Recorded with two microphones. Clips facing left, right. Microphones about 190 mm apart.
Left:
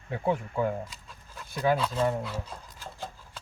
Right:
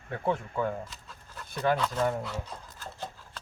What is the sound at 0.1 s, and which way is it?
Speech, 10° left (ahead or behind).